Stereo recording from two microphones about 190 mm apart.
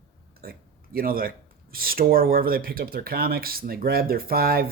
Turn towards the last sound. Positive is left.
turn(degrees=-55)  # may be behind; listen again after turning